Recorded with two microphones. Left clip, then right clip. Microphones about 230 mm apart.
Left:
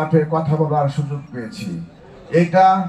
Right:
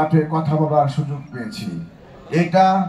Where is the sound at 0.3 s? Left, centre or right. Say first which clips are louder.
Even; right.